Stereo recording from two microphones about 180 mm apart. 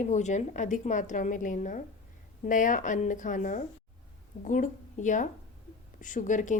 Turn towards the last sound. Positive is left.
turn(degrees=45)  # may be behind; listen again after turning